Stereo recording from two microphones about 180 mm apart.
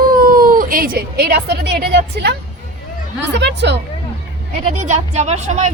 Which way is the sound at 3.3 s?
70° right (ahead or behind).